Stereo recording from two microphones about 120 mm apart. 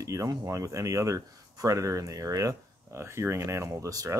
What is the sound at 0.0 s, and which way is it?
Speech, 25° right (ahead or behind).